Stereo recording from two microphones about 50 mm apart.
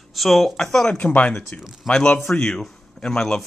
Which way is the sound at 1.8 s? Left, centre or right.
Centre.